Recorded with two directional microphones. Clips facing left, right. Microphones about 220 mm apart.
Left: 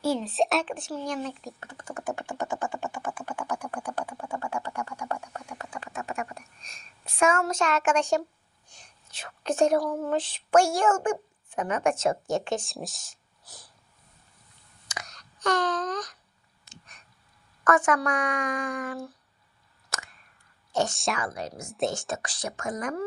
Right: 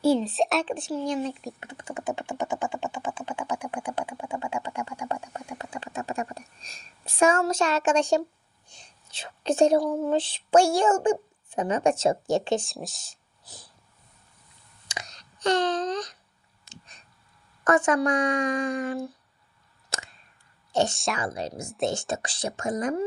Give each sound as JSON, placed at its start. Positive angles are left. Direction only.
{"t": 0.2, "sound": "speech", "side_deg": 0}
{"t": 0.6, "sound": "speech", "side_deg": -30}
{"t": 3.2, "sound": "a sound", "side_deg": -20}
{"t": 9.1, "sound": "a woman's voice", "side_deg": -30}
{"t": 12.6, "sound": "speech", "side_deg": 0}
{"t": 14.8, "sound": "a sound", "side_deg": -30}
{"t": 17.6, "sound": "speech", "side_deg": -30}
{"t": 19.9, "sound": "a sound", "side_deg": -30}
{"t": 20.9, "sound": "speech", "side_deg": 0}
{"t": 21.2, "sound": "speech", "side_deg": -30}